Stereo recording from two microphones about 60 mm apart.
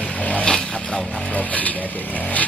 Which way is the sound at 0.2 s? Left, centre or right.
Left.